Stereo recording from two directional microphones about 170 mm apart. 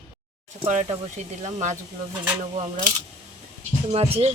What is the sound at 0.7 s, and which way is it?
Speech, 45° right (ahead or behind).